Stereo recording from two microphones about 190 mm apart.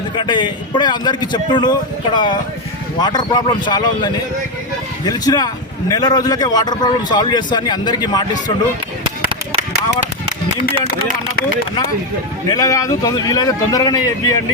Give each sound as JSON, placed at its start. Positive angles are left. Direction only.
{"t": 0.2, "sound": "a man's voice", "side_deg": 25}
{"t": 12.5, "sound": "a man's voice", "side_deg": 20}